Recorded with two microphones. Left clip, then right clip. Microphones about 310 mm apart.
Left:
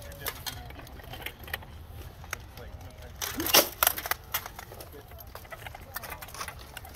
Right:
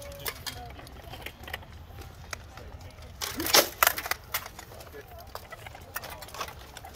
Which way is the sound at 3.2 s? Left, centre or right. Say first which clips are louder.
Right 1 dB; centre.